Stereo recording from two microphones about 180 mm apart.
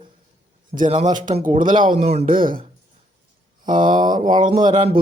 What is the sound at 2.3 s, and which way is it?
Speech, 50° right (ahead or behind).